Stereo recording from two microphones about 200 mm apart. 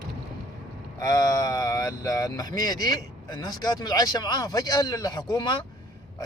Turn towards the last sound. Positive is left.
turn(degrees=20)  # may be behind; listen again after turning